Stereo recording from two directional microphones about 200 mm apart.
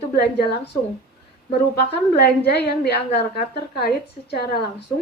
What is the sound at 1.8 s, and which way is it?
A woman's voice, 55° left (ahead or behind).